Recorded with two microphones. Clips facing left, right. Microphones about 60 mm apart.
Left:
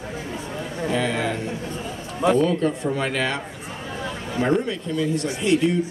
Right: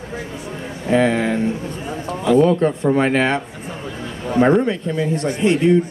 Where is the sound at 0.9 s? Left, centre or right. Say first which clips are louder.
Right 8 dB; right.